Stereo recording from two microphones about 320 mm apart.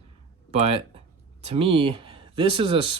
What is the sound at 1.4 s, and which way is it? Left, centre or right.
Speech, centre.